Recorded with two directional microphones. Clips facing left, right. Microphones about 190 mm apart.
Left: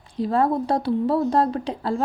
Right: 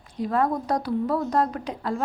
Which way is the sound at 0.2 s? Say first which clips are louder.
Left 3 dB; 30° left (ahead or behind).